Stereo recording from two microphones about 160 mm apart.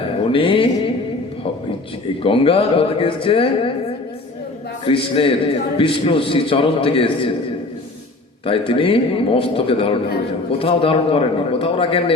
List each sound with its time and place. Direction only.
0.3 s a man's voice: 35° left (ahead or behind)
2.2 s a man's voice: 35° left (ahead or behind)
4.9 s a man's voice: 35° left (ahead or behind)
8.4 s a man's voice: 35° left (ahead or behind)